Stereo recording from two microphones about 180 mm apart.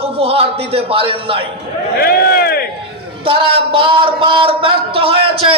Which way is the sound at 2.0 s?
55° left (ahead or behind).